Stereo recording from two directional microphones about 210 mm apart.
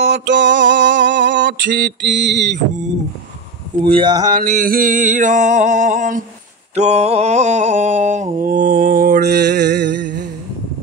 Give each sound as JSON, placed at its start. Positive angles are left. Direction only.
{"t": 0.0, "sound": "a sound", "side_deg": -55}
{"t": 3.9, "sound": "mantra", "side_deg": -20}
{"t": 4.4, "sound": "mantra", "side_deg": -40}